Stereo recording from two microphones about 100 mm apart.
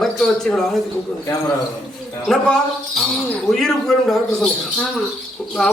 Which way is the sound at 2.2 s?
Centre (ahead or behind).